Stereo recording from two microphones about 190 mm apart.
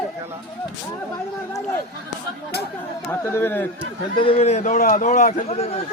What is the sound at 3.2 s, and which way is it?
Speech, 10° left (ahead or behind).